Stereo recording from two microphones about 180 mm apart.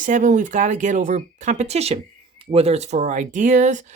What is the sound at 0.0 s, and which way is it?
Speech, 45° right (ahead or behind).